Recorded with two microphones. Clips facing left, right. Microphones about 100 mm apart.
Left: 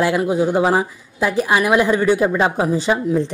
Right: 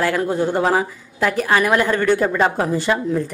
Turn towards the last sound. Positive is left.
turn(degrees=15)  # may be behind; listen again after turning